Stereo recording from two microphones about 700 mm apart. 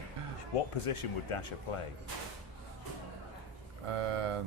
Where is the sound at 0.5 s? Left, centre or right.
Left.